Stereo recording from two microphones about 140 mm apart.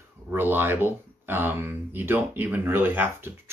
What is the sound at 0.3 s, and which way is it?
Speech, 15° right (ahead or behind).